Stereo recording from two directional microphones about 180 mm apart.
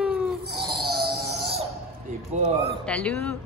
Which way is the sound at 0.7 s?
60° right (ahead or behind).